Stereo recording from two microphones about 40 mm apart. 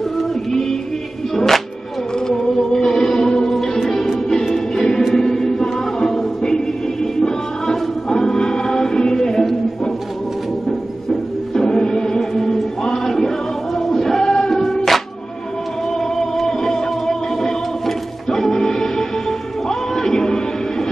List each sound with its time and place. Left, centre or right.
0.2 s music: centre
2.4 s music: centre
11.5 s music: centre
16.0 s music: centre